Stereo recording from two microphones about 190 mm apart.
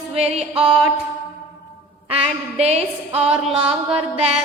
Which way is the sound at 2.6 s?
35° right (ahead or behind).